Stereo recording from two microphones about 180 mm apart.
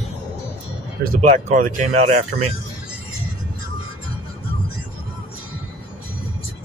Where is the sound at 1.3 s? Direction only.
45° right (ahead or behind).